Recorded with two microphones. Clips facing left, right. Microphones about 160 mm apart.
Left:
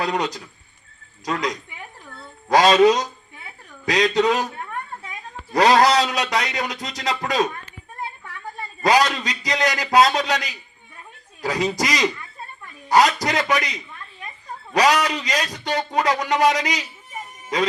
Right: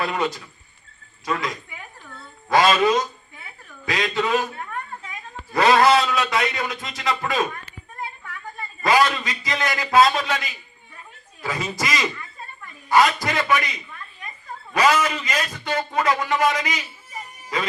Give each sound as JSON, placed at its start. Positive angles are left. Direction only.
{"t": 0.0, "sound": "a man's voice", "side_deg": 40}
{"t": 2.5, "sound": "a man's voice", "side_deg": 40}
{"t": 5.5, "sound": "a man's voice", "side_deg": 40}
{"t": 8.9, "sound": "a man's voice", "side_deg": 40}